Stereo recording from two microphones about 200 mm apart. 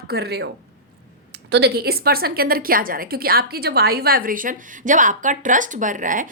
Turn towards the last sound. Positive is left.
turn(degrees=-40)  # may be behind; listen again after turning